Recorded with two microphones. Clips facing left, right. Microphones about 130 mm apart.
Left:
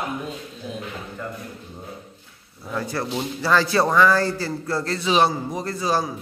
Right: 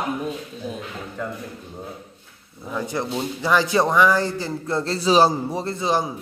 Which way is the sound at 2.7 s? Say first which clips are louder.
Right 1 dB; 15° right (ahead or behind).